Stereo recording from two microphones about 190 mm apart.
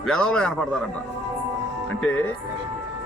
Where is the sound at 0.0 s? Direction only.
5° left (ahead or behind).